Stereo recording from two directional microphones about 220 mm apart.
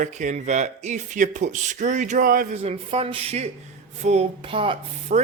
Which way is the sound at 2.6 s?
25° right (ahead or behind).